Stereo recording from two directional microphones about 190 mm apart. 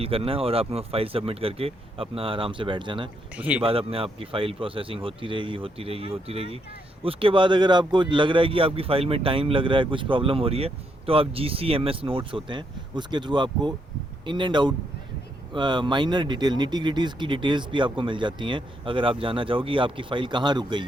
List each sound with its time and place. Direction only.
0.0 s speech: 30° right (ahead or behind)
3.3 s speech: 5° right (ahead or behind)
3.6 s speech: 30° right (ahead or behind)